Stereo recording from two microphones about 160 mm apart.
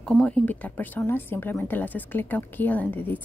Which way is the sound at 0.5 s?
10° left (ahead or behind).